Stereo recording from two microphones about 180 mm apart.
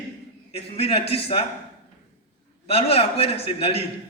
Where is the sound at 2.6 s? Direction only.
35° left (ahead or behind).